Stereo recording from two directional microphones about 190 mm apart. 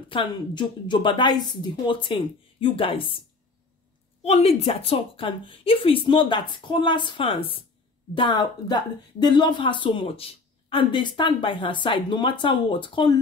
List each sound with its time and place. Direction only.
0.1 s a woman's voice: 25° left (ahead or behind)